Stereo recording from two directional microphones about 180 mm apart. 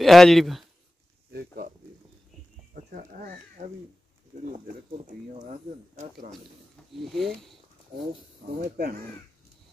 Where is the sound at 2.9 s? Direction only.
45° right (ahead or behind).